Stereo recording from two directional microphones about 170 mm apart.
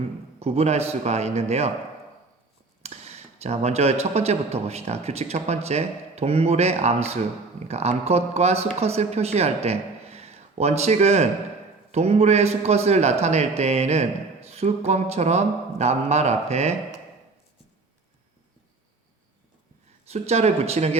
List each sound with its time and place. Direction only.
0.3 s a man's voice: 40° right (ahead or behind)
2.8 s a man's voice: 40° right (ahead or behind)
20.1 s a man's voice: 40° right (ahead or behind)